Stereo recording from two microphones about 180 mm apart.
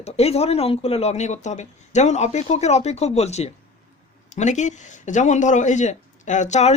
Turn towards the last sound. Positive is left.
turn(degrees=40)  # may be behind; listen again after turning